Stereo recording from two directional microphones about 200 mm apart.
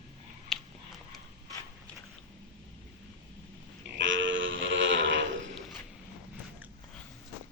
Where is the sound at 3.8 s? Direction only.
65° right (ahead or behind).